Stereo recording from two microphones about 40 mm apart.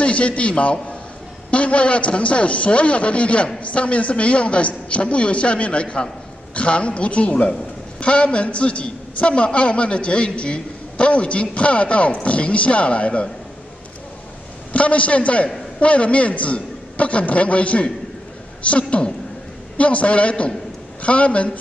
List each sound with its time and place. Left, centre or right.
0.0 s a woman's voice: left
14.7 s a woman's voice: left